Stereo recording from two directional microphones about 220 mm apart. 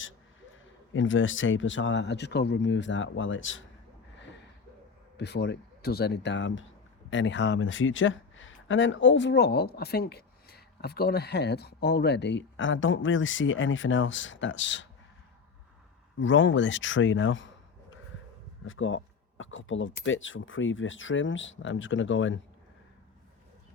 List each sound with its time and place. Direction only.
0.9 s speech: 60° left (ahead or behind)
5.1 s speech: 50° left (ahead or behind)
16.2 s speech: 60° left (ahead or behind)
18.6 s speech: 60° left (ahead or behind)